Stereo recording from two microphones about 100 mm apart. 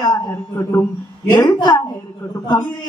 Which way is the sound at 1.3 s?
40° left (ahead or behind).